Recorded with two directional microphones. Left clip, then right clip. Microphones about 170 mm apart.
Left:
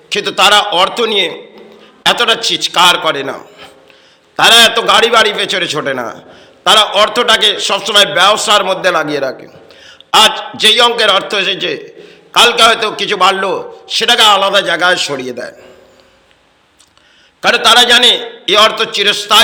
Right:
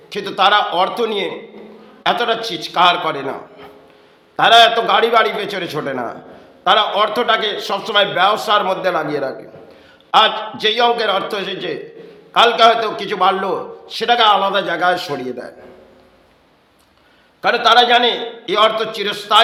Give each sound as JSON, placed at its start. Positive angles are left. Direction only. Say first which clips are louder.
{"t": 0.1, "sound": "a man's voice", "louder": "left 5 dB", "side_deg": 10}
{"t": 17.4, "sound": "a man's voice", "louder": "left 4 dB", "side_deg": 10}